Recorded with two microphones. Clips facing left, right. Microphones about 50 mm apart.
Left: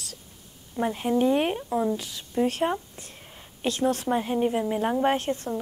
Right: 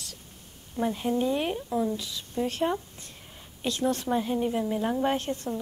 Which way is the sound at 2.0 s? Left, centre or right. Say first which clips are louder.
Left 4 dB; left.